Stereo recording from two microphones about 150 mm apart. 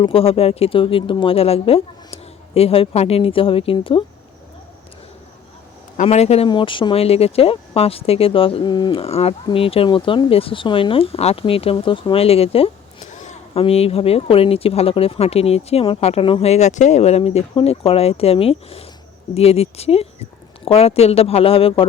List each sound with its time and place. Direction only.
0.0 s speech: 40° left (ahead or behind)
6.0 s speech: 45° left (ahead or behind)
6.5 s speech: 35° left (ahead or behind)